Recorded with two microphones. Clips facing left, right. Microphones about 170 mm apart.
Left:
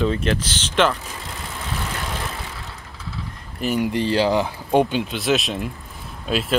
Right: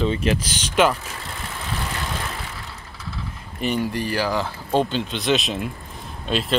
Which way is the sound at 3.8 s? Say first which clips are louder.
Left 4 dB; 25° left (ahead or behind).